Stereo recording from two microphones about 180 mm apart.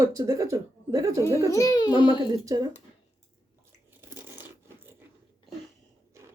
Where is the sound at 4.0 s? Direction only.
10° right (ahead or behind).